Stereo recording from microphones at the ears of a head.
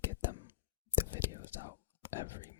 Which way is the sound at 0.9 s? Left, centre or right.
Left.